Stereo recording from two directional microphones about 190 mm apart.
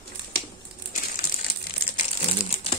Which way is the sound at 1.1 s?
45° left (ahead or behind).